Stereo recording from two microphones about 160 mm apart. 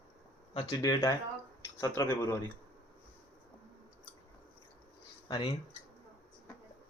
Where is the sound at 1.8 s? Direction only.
20° left (ahead or behind).